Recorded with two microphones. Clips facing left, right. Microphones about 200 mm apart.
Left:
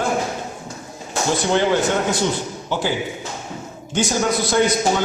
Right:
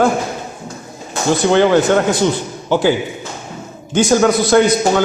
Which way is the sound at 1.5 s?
85° right.